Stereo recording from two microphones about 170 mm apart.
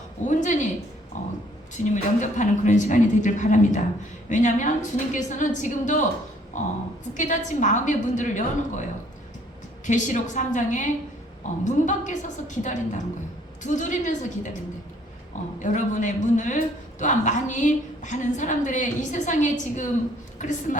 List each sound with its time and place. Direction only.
0.3 s a woman's voice: 45° left (ahead or behind)
1.1 s a sound: 45° left (ahead or behind)
1.7 s a woman's voice: 45° left (ahead or behind)
9.8 s a woman's voice: 45° left (ahead or behind)
15.5 s a woman's voice: 45° left (ahead or behind)